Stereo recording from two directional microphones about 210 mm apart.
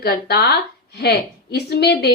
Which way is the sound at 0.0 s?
45° left (ahead or behind).